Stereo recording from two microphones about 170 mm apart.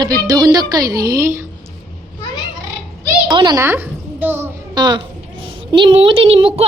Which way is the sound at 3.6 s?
10° right (ahead or behind).